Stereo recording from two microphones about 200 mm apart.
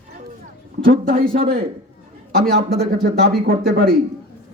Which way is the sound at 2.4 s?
50° right (ahead or behind).